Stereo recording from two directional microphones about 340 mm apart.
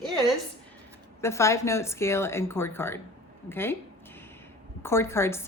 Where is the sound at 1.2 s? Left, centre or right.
Centre.